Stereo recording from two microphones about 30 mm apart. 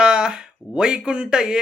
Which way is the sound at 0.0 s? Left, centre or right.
Right.